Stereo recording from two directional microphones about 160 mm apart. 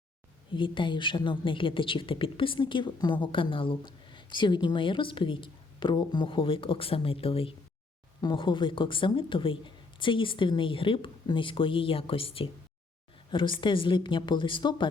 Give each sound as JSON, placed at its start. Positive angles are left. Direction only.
{"t": 0.5, "sound": "a woman's voice", "side_deg": 30}